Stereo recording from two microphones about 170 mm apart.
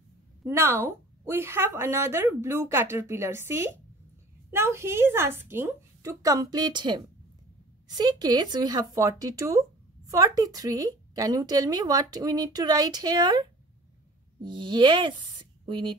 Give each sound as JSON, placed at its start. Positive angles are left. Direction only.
{"t": 0.5, "sound": "a woman's voice", "side_deg": -15}